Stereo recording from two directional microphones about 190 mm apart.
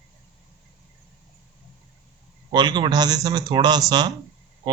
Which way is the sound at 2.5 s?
25° right (ahead or behind).